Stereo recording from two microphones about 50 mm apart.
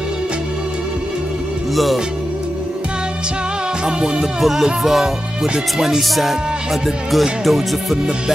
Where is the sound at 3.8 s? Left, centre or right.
Centre.